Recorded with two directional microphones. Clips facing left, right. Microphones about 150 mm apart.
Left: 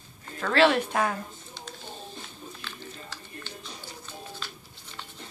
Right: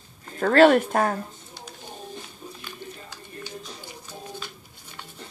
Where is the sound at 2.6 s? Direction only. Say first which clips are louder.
Right 2 dB; 15° right (ahead or behind).